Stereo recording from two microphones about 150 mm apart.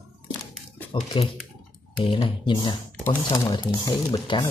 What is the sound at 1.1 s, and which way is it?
Speech, 35° left (ahead or behind).